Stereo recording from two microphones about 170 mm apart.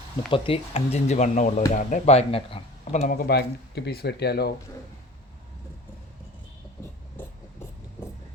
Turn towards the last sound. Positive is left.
turn(degrees=10)  # may be behind; listen again after turning